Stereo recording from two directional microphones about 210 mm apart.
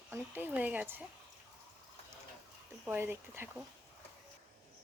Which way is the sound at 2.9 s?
10° right (ahead or behind).